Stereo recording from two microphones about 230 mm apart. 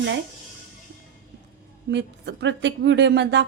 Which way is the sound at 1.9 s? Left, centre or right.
Right.